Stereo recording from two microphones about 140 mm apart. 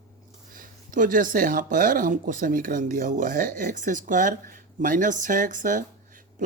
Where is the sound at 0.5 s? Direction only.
75° right (ahead or behind).